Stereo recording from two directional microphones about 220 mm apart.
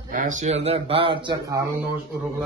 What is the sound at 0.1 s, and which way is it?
Speech, 35° right (ahead or behind).